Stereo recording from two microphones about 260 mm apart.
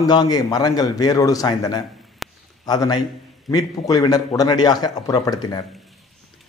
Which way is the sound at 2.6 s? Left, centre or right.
Centre.